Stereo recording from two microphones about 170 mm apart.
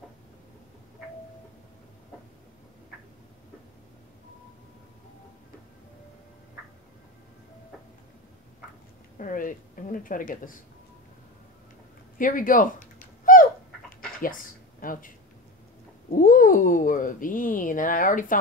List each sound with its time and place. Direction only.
9.2 s a woman's voice: 50° left (ahead or behind)
12.2 s a sound: 55° left (ahead or behind)
14.8 s speech: 55° left (ahead or behind)